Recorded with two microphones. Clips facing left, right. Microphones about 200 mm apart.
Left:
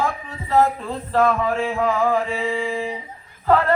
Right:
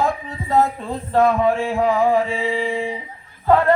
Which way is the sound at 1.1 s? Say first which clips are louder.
Right 3 dB; 30° right (ahead or behind).